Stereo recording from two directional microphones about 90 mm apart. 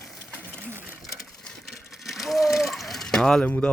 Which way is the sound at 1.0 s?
5° left (ahead or behind).